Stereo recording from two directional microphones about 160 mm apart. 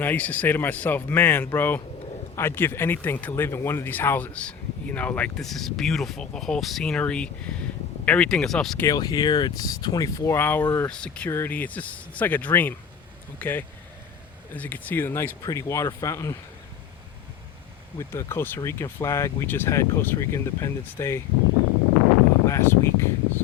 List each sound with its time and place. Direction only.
0.0 s speech: 10° left (ahead or behind)
8.8 s speech: 25° left (ahead or behind)
18.1 s speech: 15° left (ahead or behind)
22.4 s speech: 15° left (ahead or behind)